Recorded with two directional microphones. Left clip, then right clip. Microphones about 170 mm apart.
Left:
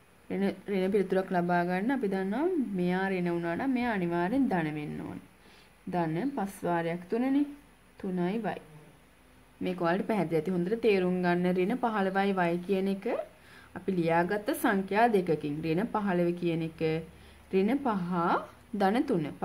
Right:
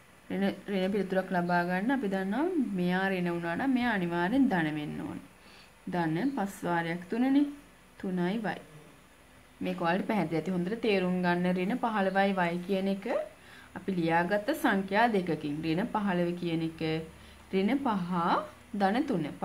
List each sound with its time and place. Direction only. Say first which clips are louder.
0.3 s a woman's voice: left 1 dB; 25° left (ahead or behind)
9.6 s a woman's voice: left 1 dB; 30° left (ahead or behind)